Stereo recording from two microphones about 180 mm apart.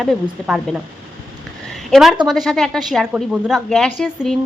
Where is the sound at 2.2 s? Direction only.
Centre (ahead or behind).